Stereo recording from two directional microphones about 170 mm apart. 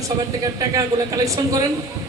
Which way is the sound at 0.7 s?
20° right (ahead or behind).